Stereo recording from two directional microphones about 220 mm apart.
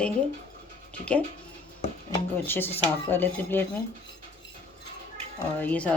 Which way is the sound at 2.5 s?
10° left (ahead or behind).